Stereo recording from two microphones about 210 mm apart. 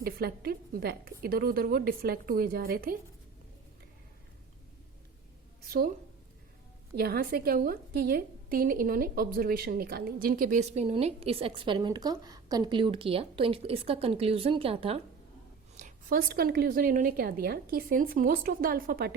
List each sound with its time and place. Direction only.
0.0 s a woman's voice: 45° right (ahead or behind)
5.6 s a woman's voice: 45° right (ahead or behind)
6.9 s a woman's voice: 45° right (ahead or behind); by 15.0 s 30° right (ahead or behind)
15.8 s a woman's voice: 40° right (ahead or behind)